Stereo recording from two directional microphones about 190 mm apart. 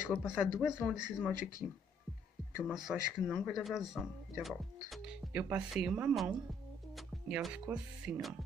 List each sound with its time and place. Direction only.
0.0 s speech: 5° right (ahead or behind)
2.6 s speech: centre (ahead or behind)